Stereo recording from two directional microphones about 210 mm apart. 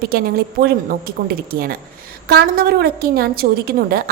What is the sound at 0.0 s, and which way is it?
A woman's voice, 45° right (ahead or behind).